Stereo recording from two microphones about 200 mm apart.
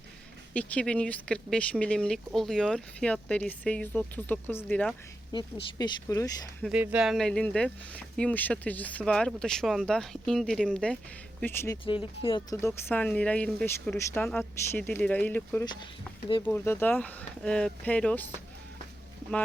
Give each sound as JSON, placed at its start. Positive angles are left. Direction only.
{"t": 0.5, "sound": "speech", "side_deg": 5}
{"t": 6.6, "sound": "speech", "side_deg": -5}
{"t": 12.2, "sound": "speech", "side_deg": 25}
{"t": 12.6, "sound": "speech", "side_deg": 10}
{"t": 15.6, "sound": "speech", "side_deg": 20}
{"t": 16.4, "sound": "speech", "side_deg": 10}